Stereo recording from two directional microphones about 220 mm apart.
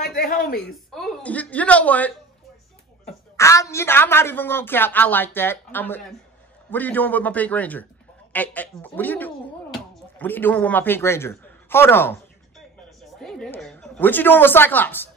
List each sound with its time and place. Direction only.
0.0 s speech: 40° left (ahead or behind)
0.6 s a woman's voice: 5° left (ahead or behind)
3.3 s a woman's voice: 15° left (ahead or behind)